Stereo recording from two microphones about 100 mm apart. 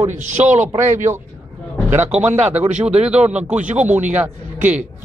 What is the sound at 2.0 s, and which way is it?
Speech, 10° right (ahead or behind).